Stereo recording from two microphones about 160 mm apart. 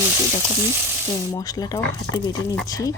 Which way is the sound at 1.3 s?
25° left (ahead or behind).